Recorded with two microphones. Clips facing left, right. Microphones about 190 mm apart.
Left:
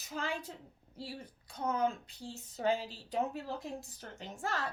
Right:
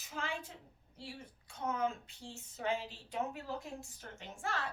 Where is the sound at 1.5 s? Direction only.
35° left (ahead or behind).